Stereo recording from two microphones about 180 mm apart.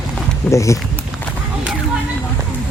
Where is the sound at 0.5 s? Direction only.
15° left (ahead or behind).